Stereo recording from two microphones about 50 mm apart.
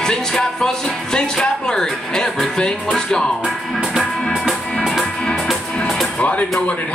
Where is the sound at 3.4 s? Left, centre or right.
Centre.